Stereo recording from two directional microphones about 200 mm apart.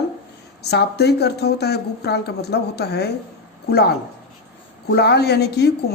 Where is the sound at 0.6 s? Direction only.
55° left (ahead or behind).